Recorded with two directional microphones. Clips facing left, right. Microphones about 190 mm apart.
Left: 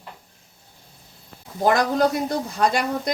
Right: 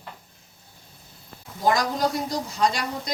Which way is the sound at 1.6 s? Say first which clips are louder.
Left 4 dB; 55° left (ahead or behind).